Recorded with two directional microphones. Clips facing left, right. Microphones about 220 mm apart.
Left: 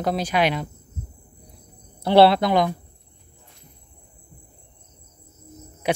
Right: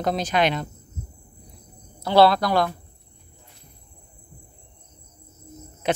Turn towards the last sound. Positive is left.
turn(degrees=10)  # may be behind; listen again after turning